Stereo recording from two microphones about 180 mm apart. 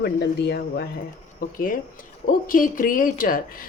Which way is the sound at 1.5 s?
50° left (ahead or behind).